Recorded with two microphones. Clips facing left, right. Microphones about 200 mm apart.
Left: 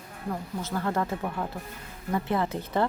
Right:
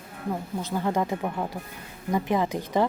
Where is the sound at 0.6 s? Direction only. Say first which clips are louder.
Right 2 dB; 15° right (ahead or behind).